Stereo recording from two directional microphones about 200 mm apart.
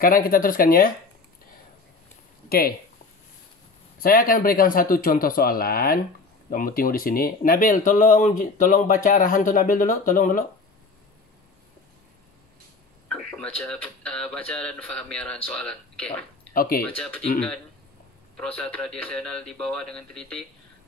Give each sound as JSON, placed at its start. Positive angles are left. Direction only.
{"t": 0.0, "sound": "a man's voice", "side_deg": 45}
{"t": 2.5, "sound": "a man's voice", "side_deg": 50}
{"t": 4.0, "sound": "a man's voice", "side_deg": 45}
{"t": 13.1, "sound": "speech", "side_deg": 5}
{"t": 16.5, "sound": "a man's voice", "side_deg": 45}
{"t": 16.8, "sound": "speech", "side_deg": 5}
{"t": 18.3, "sound": "speech", "side_deg": 5}